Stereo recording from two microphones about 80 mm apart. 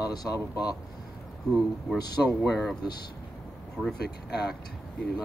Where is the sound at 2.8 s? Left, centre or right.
Left.